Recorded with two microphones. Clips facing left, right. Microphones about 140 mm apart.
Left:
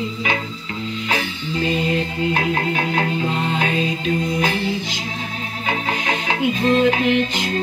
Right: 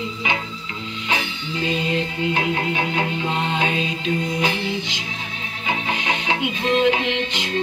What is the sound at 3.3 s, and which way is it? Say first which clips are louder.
Music: left 1 dB; 20° right (ahead or behind).